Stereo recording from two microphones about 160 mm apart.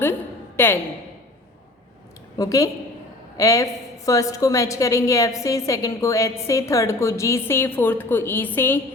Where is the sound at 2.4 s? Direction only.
20° left (ahead or behind).